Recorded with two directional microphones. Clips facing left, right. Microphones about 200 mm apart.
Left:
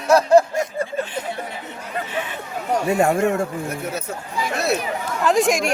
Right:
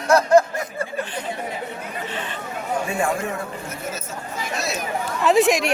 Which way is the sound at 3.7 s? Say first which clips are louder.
Left 4 dB; 65° left (ahead or behind).